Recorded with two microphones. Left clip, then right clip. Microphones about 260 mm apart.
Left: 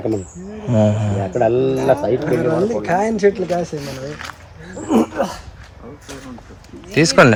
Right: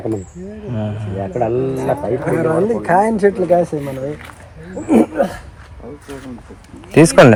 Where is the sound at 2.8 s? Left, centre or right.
Right.